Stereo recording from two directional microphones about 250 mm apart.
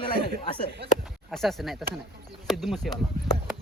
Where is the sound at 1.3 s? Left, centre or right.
Centre.